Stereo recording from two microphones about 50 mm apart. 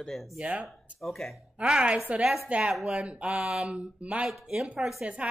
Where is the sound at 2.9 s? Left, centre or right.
Right.